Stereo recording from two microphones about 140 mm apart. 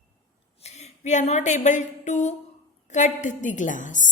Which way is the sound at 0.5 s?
50° left (ahead or behind).